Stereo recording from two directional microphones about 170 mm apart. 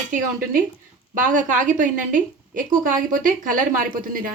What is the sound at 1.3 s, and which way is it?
A woman's voice, 45° right (ahead or behind).